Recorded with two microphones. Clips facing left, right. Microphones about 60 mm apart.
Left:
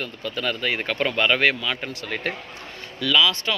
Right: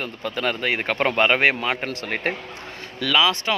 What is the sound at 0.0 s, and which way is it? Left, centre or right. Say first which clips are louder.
A man's voice: right 2 dB; right.